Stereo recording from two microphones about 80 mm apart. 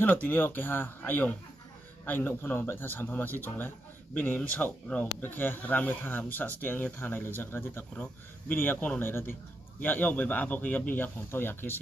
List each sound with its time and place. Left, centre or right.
0.0 s a man's voice: left
7.9 s a man's voice: centre
8.5 s a man's voice: left